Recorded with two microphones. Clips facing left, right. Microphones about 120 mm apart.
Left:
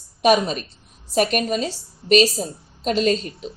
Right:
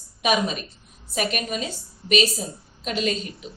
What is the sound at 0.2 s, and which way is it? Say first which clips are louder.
A woman's voice: left 5 dB; 40° left (ahead or behind).